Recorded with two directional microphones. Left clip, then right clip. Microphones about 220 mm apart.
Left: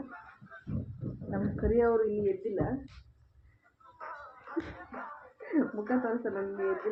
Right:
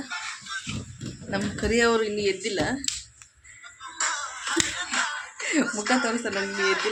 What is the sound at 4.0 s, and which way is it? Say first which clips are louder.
Music: right 15 dB; 30° right (ahead or behind).